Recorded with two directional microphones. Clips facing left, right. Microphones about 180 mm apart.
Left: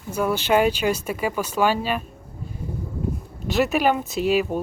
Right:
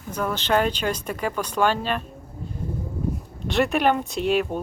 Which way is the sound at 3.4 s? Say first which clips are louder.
Left 1 dB; 5° left (ahead or behind).